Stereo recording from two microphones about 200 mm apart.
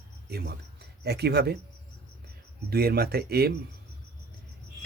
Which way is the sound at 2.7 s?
50° right (ahead or behind).